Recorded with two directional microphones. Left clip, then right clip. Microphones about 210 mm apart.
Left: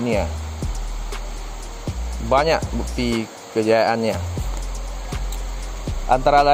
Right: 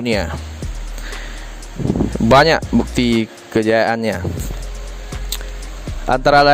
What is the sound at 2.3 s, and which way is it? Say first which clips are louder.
Speech: right 6 dB; 60° right (ahead or behind).